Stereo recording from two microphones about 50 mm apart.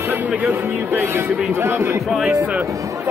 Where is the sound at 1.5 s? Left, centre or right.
Right.